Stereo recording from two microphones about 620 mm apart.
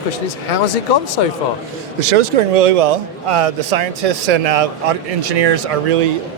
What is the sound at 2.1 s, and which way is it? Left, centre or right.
Speech, right.